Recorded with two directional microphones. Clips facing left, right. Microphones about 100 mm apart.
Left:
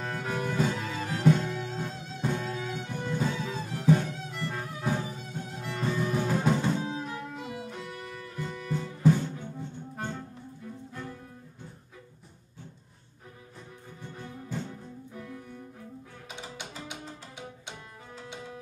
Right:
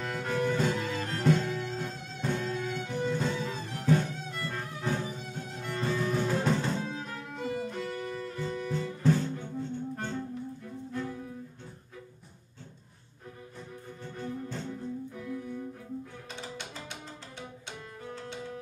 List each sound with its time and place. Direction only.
0.0 s music: 5° left (ahead or behind)
10.9 s music: centre (ahead or behind)
14.1 s music: 5° left (ahead or behind)
16.3 s music: 15° left (ahead or behind)